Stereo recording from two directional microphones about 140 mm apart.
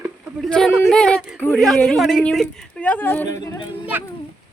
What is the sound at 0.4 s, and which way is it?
Speech, 5° left (ahead or behind).